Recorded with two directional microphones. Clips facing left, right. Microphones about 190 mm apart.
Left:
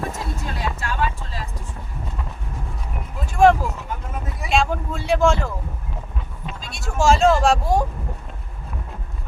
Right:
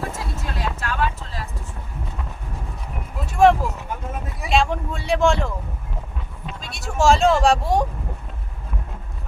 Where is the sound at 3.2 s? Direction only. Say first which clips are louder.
Even; centre (ahead or behind).